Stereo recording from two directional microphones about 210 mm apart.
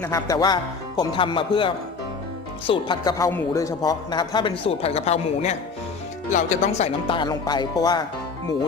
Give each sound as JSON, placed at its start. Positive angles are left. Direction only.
{"t": 0.0, "sound": "speech", "side_deg": 15}